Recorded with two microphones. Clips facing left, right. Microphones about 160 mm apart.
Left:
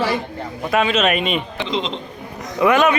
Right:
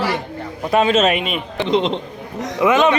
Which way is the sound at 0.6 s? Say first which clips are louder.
Right 3 dB; 30° right (ahead or behind).